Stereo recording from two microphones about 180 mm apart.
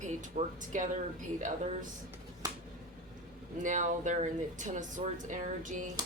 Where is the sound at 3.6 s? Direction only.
45° right (ahead or behind).